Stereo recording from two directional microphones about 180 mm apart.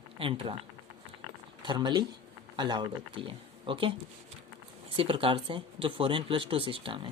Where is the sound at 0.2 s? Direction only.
30° right (ahead or behind).